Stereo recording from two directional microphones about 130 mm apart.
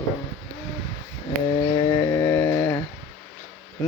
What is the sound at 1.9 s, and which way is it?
Mantra, 15° left (ahead or behind).